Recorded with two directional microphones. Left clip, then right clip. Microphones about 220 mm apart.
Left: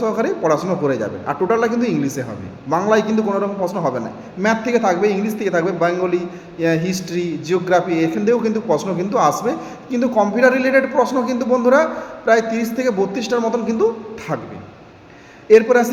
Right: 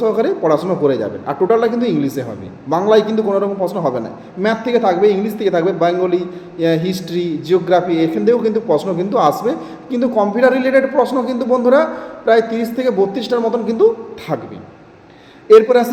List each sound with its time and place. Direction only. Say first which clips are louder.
0.0 s a man's voice: right 3 dB; 10° left (ahead or behind)
15.5 s a man's voice: right 3 dB; 5° left (ahead or behind)